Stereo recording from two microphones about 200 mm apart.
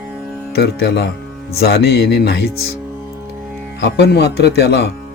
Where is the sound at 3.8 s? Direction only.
55° left (ahead or behind).